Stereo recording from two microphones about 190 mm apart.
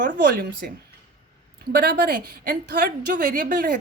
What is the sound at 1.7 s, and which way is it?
A woman's voice, 55° right (ahead or behind).